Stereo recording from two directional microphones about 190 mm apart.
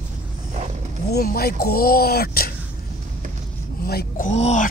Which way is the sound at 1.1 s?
55° left (ahead or behind).